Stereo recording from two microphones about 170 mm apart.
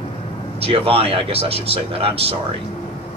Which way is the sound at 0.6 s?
35° right (ahead or behind).